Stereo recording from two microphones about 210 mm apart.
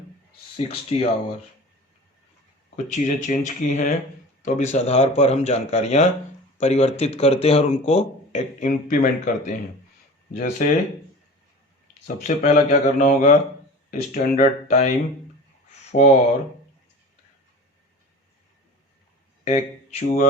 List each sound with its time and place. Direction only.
0.5 s speech: 25° left (ahead or behind)
2.7 s speech: 35° left (ahead or behind)
12.4 s speech: 30° left (ahead or behind)
19.5 s speech: 30° left (ahead or behind)